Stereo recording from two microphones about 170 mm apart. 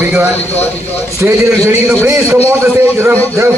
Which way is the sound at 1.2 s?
15° right (ahead or behind).